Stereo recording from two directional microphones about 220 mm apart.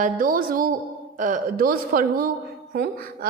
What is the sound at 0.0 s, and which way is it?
A woman's voice, 40° right (ahead or behind).